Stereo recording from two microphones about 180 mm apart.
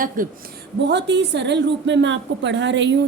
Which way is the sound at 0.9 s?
75° right (ahead or behind).